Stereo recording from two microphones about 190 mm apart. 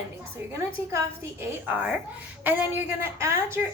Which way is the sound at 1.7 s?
5° right (ahead or behind).